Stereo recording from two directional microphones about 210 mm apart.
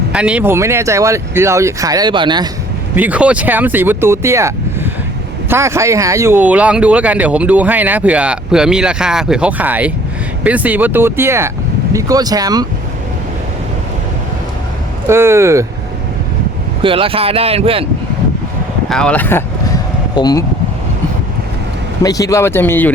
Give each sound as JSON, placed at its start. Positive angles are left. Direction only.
{"t": 0.1, "sound": "speech", "side_deg": -5}
{"t": 2.9, "sound": "speech", "side_deg": -5}
{"t": 15.0, "sound": "speech", "side_deg": -10}
{"t": 16.8, "sound": "speech", "side_deg": -25}
{"t": 18.9, "sound": "a sound", "side_deg": 5}
{"t": 22.0, "sound": "speech", "side_deg": 15}